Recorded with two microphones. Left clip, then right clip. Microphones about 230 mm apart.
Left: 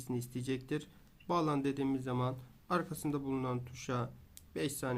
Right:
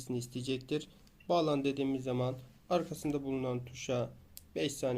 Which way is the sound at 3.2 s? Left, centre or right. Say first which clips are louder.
Right 1 dB; left.